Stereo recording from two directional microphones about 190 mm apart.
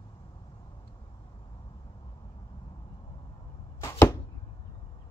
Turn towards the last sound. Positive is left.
turn(degrees=15)  # may be behind; listen again after turning